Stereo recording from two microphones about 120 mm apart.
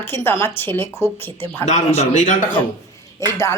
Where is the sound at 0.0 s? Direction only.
20° left (ahead or behind).